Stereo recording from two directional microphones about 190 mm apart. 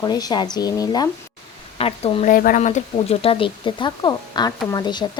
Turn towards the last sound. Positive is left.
turn(degrees=20)  # may be behind; listen again after turning